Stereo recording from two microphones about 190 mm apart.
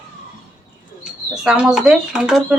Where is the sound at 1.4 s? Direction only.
5° right (ahead or behind).